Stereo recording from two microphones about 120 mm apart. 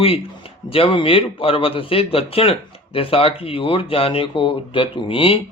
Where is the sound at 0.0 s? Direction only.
50° left (ahead or behind).